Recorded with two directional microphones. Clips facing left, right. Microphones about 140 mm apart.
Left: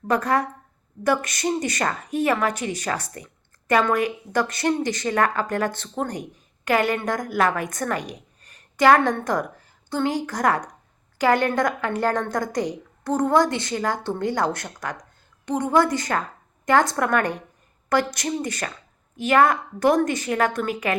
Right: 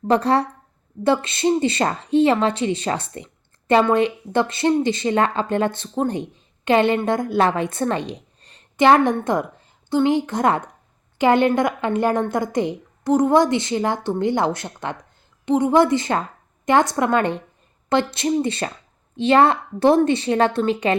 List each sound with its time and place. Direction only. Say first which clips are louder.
0.1 s speech: right 4 dB; 30° right (ahead or behind)